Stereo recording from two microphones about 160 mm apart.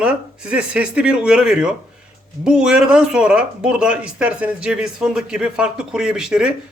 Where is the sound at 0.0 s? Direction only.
5° right (ahead or behind).